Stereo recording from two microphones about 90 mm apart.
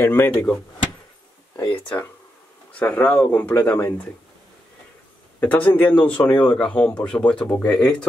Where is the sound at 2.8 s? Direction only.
15° left (ahead or behind).